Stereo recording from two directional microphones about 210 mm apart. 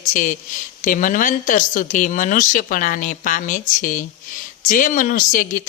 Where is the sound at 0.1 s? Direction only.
40° left (ahead or behind).